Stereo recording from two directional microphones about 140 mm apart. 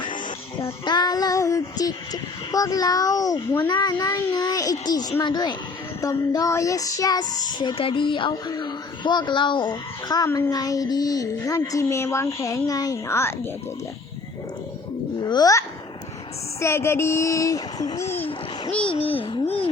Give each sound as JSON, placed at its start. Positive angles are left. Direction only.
{"t": 0.9, "sound": "child singing", "side_deg": 30}
{"t": 5.2, "sound": "speech", "side_deg": 30}
{"t": 6.0, "sound": "child singing", "side_deg": 25}
{"t": 15.2, "sound": "a child's voice", "side_deg": 30}
{"t": 16.6, "sound": "child singing", "side_deg": 20}
{"t": 18.8, "sound": "speech", "side_deg": 40}
{"t": 19.2, "sound": "a sound", "side_deg": 40}